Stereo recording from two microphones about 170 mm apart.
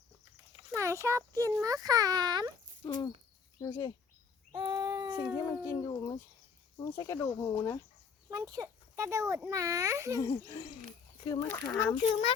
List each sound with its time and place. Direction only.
0.7 s speech: 15° right (ahead or behind)
2.8 s speech: 25° left (ahead or behind)
4.5 s a sound: 25° right (ahead or behind)
5.5 s speech: 20° left (ahead or behind)
8.3 s speech: 20° right (ahead or behind)
10.2 s speech: 20° left (ahead or behind)